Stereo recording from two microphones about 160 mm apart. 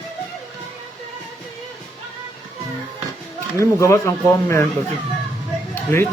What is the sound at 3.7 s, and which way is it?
Speech, 20° left (ahead or behind).